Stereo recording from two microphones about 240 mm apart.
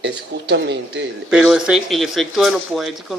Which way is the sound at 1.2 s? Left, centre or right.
Centre.